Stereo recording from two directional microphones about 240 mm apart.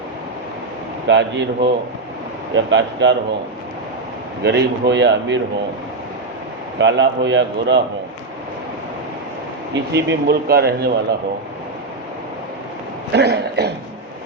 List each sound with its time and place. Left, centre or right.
1.0 s speech: right
4.4 s speech: right
6.7 s speech: right
9.7 s speech: right
13.1 s speech: right